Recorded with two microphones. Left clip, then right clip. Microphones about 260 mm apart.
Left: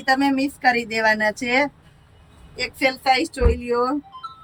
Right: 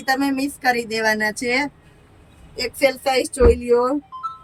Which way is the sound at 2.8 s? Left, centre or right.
Centre.